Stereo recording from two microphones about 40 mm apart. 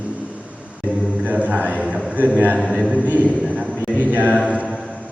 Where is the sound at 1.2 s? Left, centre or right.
Right.